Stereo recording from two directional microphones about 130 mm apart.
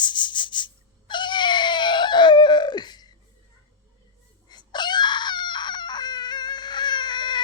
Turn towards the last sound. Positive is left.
turn(degrees=35)  # may be behind; listen again after turning